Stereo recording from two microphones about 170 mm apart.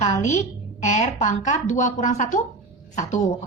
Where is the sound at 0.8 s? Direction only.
45° left (ahead or behind).